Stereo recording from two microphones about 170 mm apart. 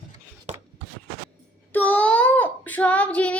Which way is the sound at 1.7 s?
10° left (ahead or behind).